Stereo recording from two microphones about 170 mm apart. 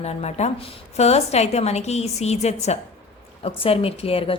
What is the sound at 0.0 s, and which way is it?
Speech, 40° left (ahead or behind).